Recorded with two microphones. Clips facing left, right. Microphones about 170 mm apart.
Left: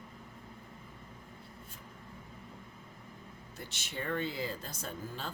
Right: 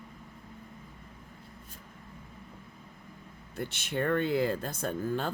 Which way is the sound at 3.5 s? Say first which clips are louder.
Right 10 dB; 55° right (ahead or behind).